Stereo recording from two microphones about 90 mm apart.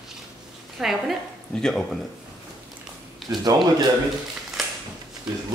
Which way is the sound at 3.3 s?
50° right (ahead or behind).